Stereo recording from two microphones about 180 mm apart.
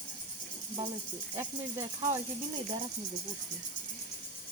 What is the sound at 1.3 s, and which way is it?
Speech, 15° right (ahead or behind).